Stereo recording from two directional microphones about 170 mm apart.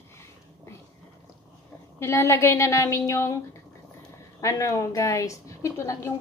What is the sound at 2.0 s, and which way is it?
A woman's voice, 15° left (ahead or behind).